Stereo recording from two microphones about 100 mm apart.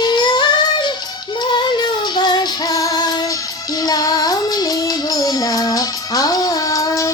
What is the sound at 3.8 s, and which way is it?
Child singing, 40° left (ahead or behind).